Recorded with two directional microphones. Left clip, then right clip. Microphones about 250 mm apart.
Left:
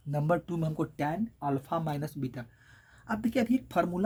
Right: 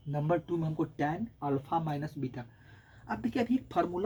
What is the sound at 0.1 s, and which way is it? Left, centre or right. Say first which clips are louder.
Speech: left 1 dB; left.